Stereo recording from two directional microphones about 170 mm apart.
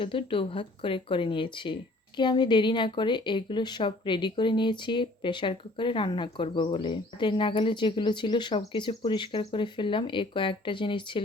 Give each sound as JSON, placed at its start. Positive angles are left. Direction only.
{"t": 0.0, "sound": "speech", "side_deg": 30}